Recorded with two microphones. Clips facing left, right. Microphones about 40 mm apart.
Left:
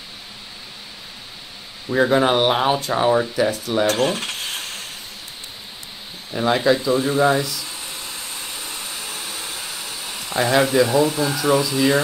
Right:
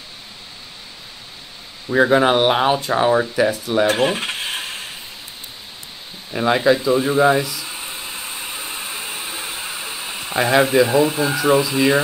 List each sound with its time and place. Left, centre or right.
1.9 s speech: centre
3.8 s mechanisms: right
6.3 s speech: centre
7.7 s vacuum cleaner: right